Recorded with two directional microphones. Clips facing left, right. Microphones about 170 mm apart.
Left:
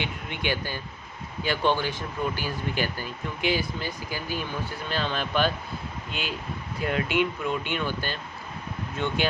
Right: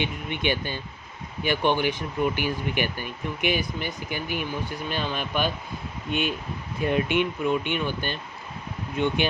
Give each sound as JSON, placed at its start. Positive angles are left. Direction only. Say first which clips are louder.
{"t": 0.0, "sound": "speech", "louder": "right 4 dB", "side_deg": -20}
{"t": 6.8, "sound": "speech", "louder": "right 2 dB", "side_deg": -20}